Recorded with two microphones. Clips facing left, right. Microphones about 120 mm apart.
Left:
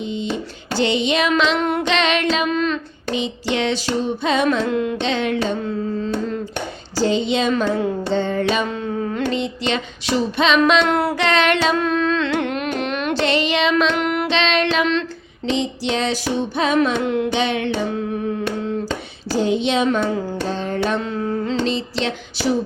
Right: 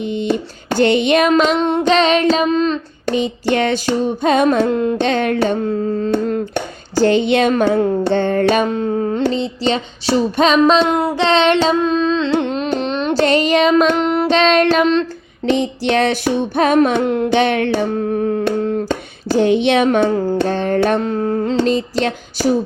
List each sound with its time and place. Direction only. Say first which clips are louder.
0.0 s a sound: right 6 dB; 60° right (ahead or behind)
1.3 s female singing: right 5 dB; 45° right (ahead or behind)
1.5 s child singing: right 4 dB; 25° right (ahead or behind)
1.9 s child singing: right 8 dB; 35° right (ahead or behind)
3.1 s female singing: right 5 dB; 50° right (ahead or behind)
10.8 s a sound: right 2 dB; 20° right (ahead or behind)
11.2 s music: right 7 dB; 30° right (ahead or behind)
13.1 s female singing: right 6 dB; 45° right (ahead or behind)
14.0 s child singing: right 6 dB; 30° right (ahead or behind)
15.4 s female singing: right 5 dB; 55° right (ahead or behind)